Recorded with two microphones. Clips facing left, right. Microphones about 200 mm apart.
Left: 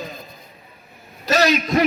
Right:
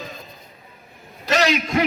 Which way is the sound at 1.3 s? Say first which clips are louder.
Left 2 dB; 35° left (ahead or behind).